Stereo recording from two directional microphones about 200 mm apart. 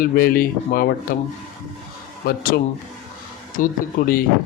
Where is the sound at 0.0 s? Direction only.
45° left (ahead or behind).